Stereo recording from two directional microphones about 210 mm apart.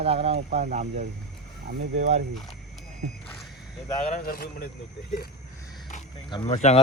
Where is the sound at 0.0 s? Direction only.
30° right (ahead or behind).